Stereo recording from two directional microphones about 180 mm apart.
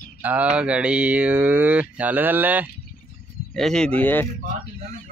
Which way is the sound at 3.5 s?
5° left (ahead or behind).